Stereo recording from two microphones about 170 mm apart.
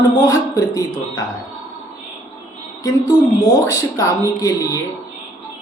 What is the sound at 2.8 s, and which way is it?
Speech, 25° left (ahead or behind).